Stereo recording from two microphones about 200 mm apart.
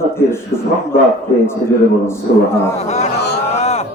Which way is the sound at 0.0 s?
10° left (ahead or behind).